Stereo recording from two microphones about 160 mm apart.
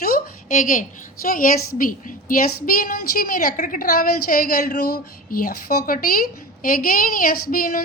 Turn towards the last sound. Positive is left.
turn(degrees=65)  # may be behind; listen again after turning